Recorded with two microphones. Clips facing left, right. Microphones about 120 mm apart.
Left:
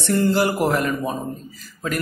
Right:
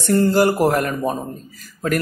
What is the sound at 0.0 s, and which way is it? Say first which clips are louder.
A man's voice: right 3 dB; 40° right (ahead or behind).